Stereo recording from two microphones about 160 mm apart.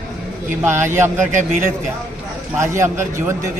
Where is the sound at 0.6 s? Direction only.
15° right (ahead or behind).